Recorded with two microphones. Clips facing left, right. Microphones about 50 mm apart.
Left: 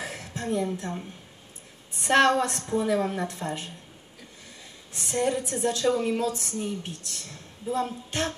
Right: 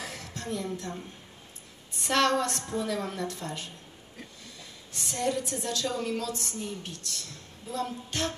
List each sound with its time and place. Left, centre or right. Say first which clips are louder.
0.0 s a sound: left 4 dB; left
2.0 s a woman's voice: left 5 dB; left
4.9 s a woman's voice: left 4 dB; left